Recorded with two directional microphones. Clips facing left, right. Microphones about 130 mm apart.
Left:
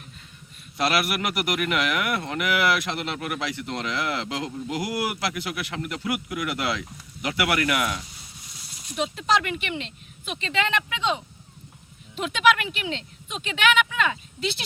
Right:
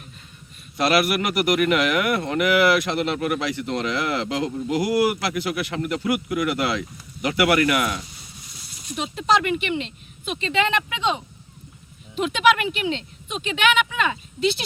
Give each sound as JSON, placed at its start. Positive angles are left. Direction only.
{"t": 0.8, "sound": "speech", "side_deg": 5}
{"t": 9.0, "sound": "speech", "side_deg": -15}
{"t": 12.2, "sound": "speech", "side_deg": -15}